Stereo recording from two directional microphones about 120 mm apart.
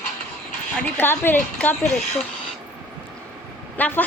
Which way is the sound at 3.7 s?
15° left (ahead or behind).